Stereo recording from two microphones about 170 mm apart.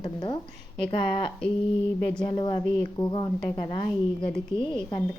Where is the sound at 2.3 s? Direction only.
25° left (ahead or behind).